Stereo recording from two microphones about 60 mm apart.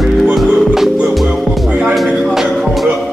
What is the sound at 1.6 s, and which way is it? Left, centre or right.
Music, right.